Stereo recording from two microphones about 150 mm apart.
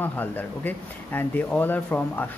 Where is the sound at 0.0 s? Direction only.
10° left (ahead or behind).